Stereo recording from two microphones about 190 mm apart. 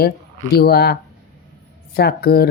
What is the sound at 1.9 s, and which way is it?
Speech, 55° left (ahead or behind).